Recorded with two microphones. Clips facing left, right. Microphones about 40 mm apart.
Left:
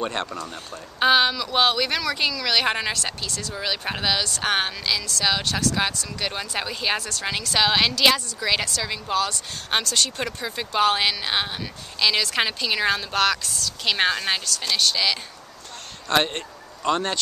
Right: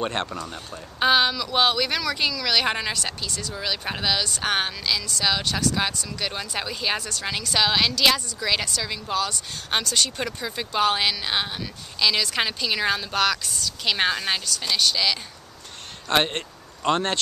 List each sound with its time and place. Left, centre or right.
0.0 s speech: centre
0.3 s speech: centre
16.1 s speech: centre